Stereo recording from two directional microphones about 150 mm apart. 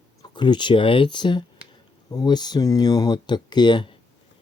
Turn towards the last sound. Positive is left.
turn(degrees=30)  # may be behind; listen again after turning